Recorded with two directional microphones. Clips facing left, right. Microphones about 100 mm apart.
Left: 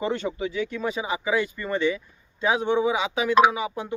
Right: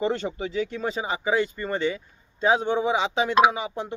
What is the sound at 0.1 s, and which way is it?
A man's voice, 35° right (ahead or behind).